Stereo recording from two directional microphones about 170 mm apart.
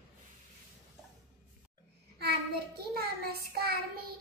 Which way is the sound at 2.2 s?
65° right (ahead or behind).